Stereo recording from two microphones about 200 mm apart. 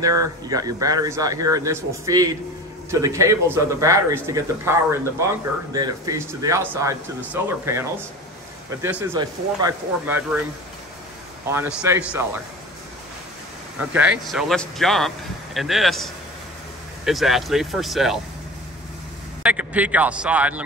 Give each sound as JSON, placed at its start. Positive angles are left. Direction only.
{"t": 0.0, "sound": "a man's voice", "side_deg": -20}
{"t": 9.0, "sound": "a man's voice", "side_deg": -20}
{"t": 11.4, "sound": "a man's voice", "side_deg": -10}
{"t": 13.7, "sound": "speech", "side_deg": -5}
{"t": 19.4, "sound": "a man's voice", "side_deg": -5}